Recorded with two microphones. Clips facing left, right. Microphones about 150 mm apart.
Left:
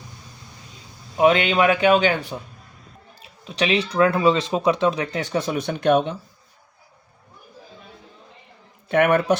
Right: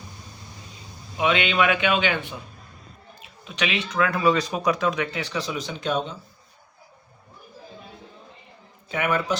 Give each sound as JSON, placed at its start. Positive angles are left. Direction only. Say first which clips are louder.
{"t": 1.1, "sound": "speech", "louder": "left 6 dB", "side_deg": 40}
{"t": 8.9, "sound": "speech", "louder": "left 7 dB", "side_deg": 55}